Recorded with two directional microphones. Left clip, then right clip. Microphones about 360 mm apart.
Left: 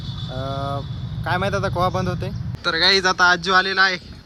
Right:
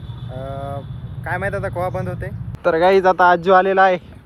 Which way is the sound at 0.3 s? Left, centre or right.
Centre.